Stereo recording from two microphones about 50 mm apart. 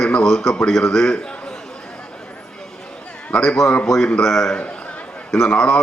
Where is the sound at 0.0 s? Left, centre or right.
Centre.